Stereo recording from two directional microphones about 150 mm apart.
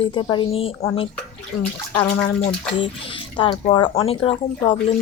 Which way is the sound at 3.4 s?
30° left (ahead or behind).